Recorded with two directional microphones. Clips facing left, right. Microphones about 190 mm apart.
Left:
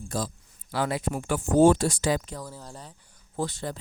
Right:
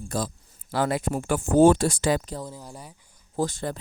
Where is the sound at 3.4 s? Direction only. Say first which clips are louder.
Right 4 dB; 45° right (ahead or behind).